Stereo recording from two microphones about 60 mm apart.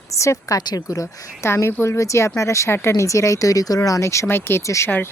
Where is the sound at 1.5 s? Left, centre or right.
Left.